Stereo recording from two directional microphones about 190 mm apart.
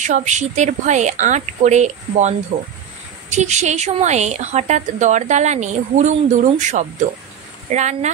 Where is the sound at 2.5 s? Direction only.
25° right (ahead or behind).